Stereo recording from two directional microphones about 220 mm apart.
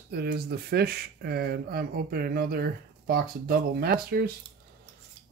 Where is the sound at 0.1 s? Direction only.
45° right (ahead or behind).